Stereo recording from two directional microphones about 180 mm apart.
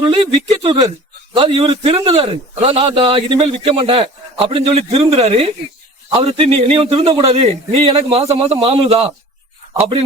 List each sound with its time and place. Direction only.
0.6 s a man's voice: 30° right (ahead or behind)